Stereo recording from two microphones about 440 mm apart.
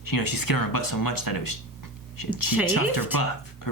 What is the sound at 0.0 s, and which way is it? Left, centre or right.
Speech, left.